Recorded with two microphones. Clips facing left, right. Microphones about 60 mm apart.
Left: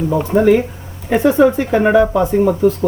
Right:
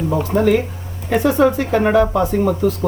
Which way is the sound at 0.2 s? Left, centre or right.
Centre.